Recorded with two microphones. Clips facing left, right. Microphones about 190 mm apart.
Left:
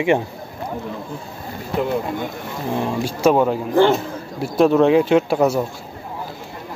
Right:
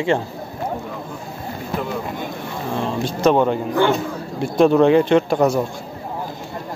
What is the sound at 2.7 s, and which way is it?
A man's voice, 10° left (ahead or behind).